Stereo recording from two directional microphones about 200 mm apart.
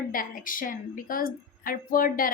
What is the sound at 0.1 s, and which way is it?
A woman's voice, 45° left (ahead or behind).